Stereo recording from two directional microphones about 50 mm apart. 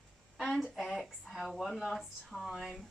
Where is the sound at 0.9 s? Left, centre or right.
Centre.